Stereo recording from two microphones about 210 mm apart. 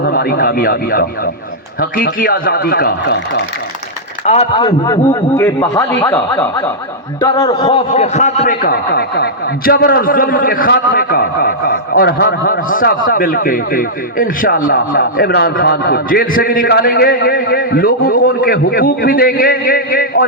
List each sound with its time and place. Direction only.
0.0 s speech: 50° left (ahead or behind)
4.3 s speech: 25° left (ahead or behind); by 20.2 s 40° left (ahead or behind)